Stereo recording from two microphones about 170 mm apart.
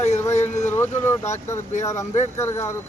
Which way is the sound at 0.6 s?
15° left (ahead or behind).